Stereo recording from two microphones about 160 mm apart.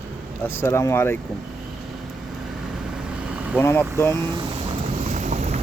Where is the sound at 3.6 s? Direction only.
15° left (ahead or behind).